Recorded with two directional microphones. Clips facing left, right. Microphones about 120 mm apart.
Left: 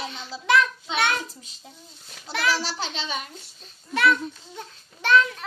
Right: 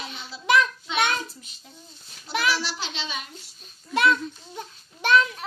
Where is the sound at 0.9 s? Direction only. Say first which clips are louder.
Right 2 dB; 30° left (ahead or behind).